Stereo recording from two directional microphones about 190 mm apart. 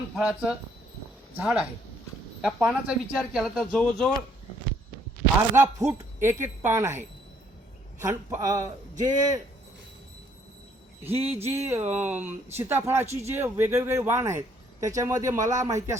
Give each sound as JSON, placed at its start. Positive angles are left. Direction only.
{"t": 0.2, "sound": "speech", "side_deg": -5}
{"t": 2.6, "sound": "speech", "side_deg": -5}
{"t": 5.4, "sound": "speech", "side_deg": -15}
{"t": 11.0, "sound": "speech", "side_deg": -10}